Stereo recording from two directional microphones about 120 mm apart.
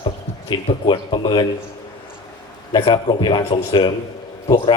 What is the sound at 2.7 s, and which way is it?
A man's voice, 40° left (ahead or behind).